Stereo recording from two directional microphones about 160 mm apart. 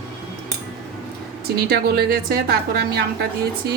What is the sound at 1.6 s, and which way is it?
A woman's voice, 75° right (ahead or behind).